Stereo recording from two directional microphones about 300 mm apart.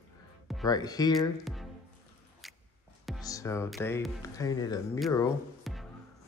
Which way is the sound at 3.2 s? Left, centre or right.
Centre.